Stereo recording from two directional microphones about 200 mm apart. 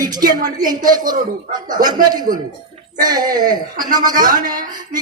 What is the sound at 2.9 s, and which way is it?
A man's voice, 20° right (ahead or behind).